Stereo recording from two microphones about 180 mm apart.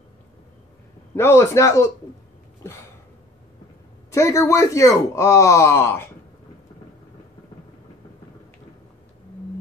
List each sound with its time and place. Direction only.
1.1 s speech: 15° left (ahead or behind)
4.1 s speech: 15° left (ahead or behind)